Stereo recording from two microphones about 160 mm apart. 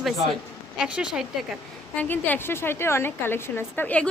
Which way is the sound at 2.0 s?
10° left (ahead or behind).